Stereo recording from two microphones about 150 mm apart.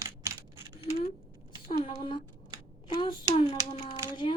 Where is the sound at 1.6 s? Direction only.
35° left (ahead or behind).